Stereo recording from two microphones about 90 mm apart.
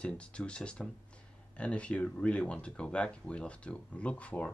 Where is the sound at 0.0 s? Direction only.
10° left (ahead or behind).